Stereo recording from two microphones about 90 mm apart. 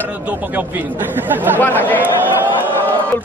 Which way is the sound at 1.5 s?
20° left (ahead or behind).